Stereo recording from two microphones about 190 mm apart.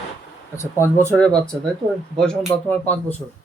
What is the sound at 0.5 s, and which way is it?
Speech, 15° left (ahead or behind).